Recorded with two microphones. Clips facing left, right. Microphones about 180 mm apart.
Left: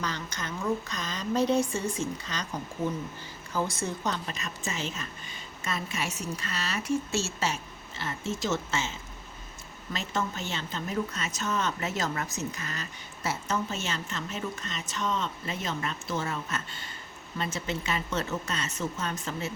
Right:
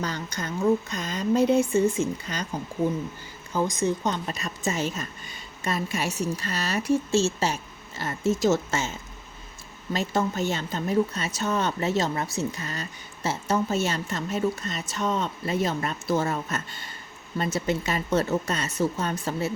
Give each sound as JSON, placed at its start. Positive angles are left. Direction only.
{"t": 0.0, "sound": "speech", "side_deg": -35}
{"t": 1.4, "sound": "speech", "side_deg": -5}
{"t": 1.6, "sound": "speech", "side_deg": -25}
{"t": 3.5, "sound": "speech", "side_deg": -20}
{"t": 4.3, "sound": "speech", "side_deg": -35}